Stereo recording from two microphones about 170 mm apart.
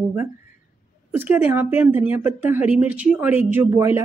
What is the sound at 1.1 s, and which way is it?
Speech, 10° right (ahead or behind).